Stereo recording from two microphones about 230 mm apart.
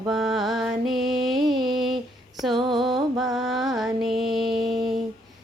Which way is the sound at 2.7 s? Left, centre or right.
Centre.